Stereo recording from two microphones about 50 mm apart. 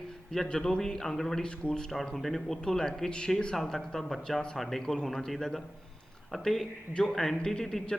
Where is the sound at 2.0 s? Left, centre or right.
Centre.